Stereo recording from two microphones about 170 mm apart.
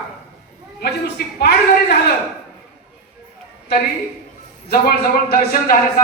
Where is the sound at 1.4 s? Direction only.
70° left (ahead or behind).